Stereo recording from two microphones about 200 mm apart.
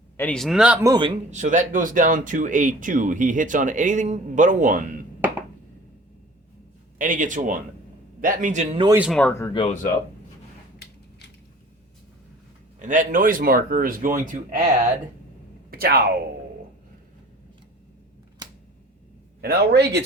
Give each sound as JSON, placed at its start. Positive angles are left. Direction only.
{"t": 0.2, "sound": "speech", "side_deg": 5}
{"t": 0.9, "sound": "speech", "side_deg": -25}
{"t": 1.3, "sound": "speech", "side_deg": -40}
{"t": 7.0, "sound": "speech", "side_deg": -40}
{"t": 9.0, "sound": "speech", "side_deg": 0}
{"t": 9.3, "sound": "speech", "side_deg": 15}
{"t": 9.6, "sound": "speech", "side_deg": 30}
{"t": 12.8, "sound": "speech", "side_deg": -40}
{"t": 15.7, "sound": "a sound", "side_deg": -50}
{"t": 18.4, "sound": "a sound", "side_deg": -20}
{"t": 19.4, "sound": "speech", "side_deg": -50}